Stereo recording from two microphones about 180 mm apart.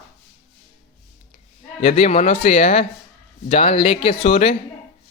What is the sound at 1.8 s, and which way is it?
Speech, 40° left (ahead or behind).